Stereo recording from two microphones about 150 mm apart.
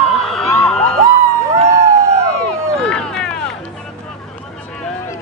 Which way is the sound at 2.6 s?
5° left (ahead or behind).